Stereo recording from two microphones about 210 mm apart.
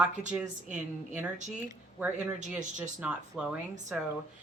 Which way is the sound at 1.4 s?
35° right (ahead or behind).